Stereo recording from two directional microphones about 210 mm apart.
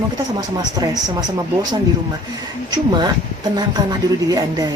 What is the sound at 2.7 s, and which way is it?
Speech, 20° right (ahead or behind).